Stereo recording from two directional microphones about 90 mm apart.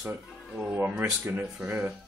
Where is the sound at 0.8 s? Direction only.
30° right (ahead or behind).